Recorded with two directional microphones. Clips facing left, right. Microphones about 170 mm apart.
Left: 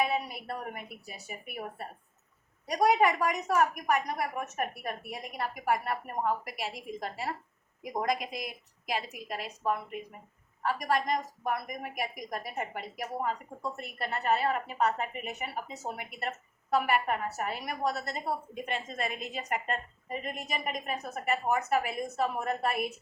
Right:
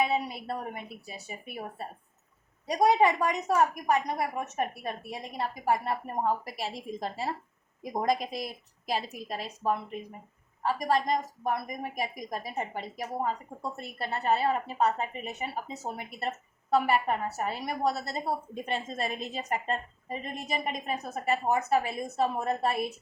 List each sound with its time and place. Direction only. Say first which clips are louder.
0.0 s a woman's voice: right 2 dB; 25° right (ahead or behind)